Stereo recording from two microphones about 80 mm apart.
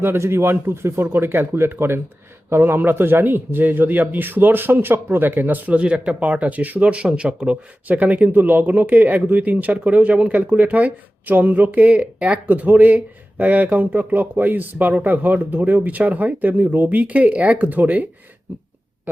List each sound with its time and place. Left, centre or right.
0.0 s a man's voice: right